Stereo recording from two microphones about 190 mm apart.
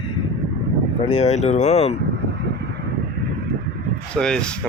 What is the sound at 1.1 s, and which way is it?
Speech, 35° left (ahead or behind).